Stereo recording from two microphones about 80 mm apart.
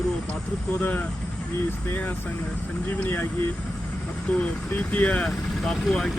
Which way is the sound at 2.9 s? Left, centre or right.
Left.